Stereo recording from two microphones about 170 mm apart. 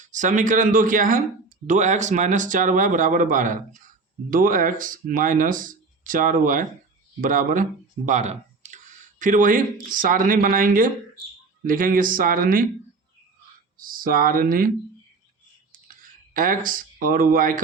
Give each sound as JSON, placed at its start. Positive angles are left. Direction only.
{"t": 0.0, "sound": "speech", "side_deg": -45}
{"t": 13.7, "sound": "speech", "side_deg": -55}
{"t": 16.0, "sound": "speech", "side_deg": -55}